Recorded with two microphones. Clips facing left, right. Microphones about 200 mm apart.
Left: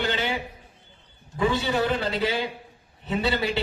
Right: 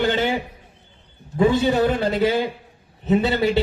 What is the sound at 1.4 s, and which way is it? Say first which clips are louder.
A man's voice: right 7 dB; 45° right (ahead or behind).